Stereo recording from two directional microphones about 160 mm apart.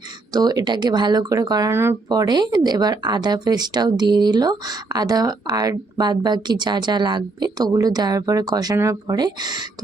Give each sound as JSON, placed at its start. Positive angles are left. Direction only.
{"t": 0.3, "sound": "speech", "side_deg": -25}
{"t": 2.0, "sound": "speech", "side_deg": -25}